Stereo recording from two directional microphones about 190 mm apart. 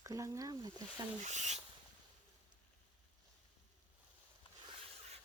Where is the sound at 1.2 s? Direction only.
40° right (ahead or behind).